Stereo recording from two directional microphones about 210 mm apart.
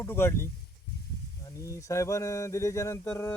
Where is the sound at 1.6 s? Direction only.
15° left (ahead or behind).